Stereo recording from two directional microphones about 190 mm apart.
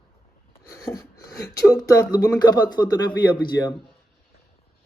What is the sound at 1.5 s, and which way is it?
Speech, 15° left (ahead or behind).